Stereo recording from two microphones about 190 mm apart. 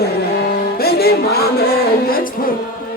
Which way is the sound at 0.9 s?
55° left (ahead or behind).